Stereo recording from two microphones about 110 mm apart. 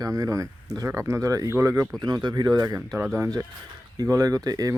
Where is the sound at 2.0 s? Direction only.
40° right (ahead or behind).